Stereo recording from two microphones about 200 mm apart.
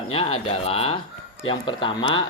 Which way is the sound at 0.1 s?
30° left (ahead or behind).